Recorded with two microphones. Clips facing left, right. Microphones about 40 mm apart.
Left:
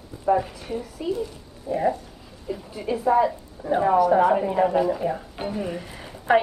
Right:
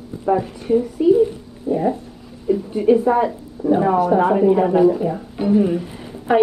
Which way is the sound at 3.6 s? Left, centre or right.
Centre.